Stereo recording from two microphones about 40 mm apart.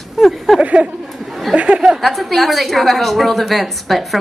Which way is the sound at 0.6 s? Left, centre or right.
Right.